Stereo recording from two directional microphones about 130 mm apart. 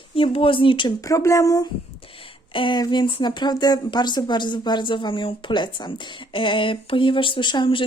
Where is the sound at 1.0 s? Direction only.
25° left (ahead or behind).